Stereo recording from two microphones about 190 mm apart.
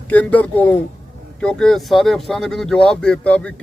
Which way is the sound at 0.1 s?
10° left (ahead or behind).